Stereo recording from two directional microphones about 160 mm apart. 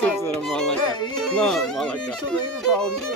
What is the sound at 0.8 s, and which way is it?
Bagpipes, 25° left (ahead or behind).